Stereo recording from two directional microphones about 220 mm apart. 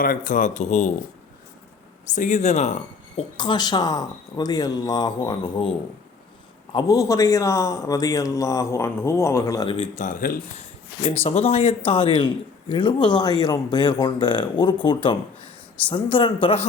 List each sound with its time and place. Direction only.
0.0 s speech: 40° left (ahead or behind)
2.1 s speech: 35° left (ahead or behind)
3.3 s a man's voice: 20° left (ahead or behind)
6.7 s a man's voice: 15° left (ahead or behind); by 10.3 s 40° left (ahead or behind)
11.2 s speech: 25° left (ahead or behind)